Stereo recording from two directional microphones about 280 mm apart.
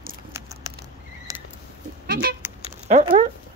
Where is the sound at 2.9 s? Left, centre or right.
Right.